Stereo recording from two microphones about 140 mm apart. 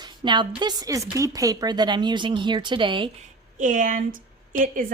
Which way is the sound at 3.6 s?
65° right (ahead or behind).